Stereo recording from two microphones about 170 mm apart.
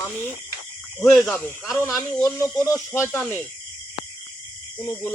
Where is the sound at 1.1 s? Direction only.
5° left (ahead or behind).